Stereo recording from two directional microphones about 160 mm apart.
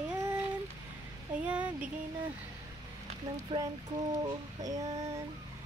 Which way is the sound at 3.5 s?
30° right (ahead or behind).